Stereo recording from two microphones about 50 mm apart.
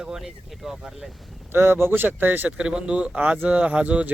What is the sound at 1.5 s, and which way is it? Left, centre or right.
Speech, right.